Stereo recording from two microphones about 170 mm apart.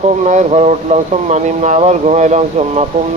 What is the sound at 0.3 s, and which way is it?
Speech, 45° right (ahead or behind).